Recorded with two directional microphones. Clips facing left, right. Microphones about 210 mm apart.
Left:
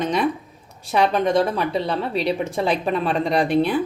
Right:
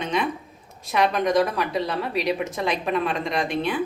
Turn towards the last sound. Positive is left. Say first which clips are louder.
# left 6 dB
turn(degrees=35)  # may be behind; listen again after turning